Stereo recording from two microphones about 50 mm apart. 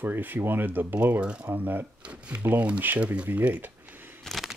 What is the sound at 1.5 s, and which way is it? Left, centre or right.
Speech, right.